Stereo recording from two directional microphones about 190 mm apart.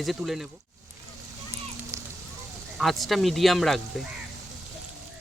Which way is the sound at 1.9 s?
15° right (ahead or behind).